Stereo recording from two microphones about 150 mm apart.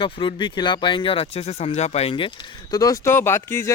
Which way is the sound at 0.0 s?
35° left (ahead or behind).